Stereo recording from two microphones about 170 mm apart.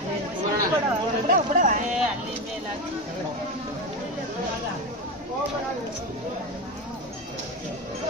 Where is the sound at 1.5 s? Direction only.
50° right (ahead or behind).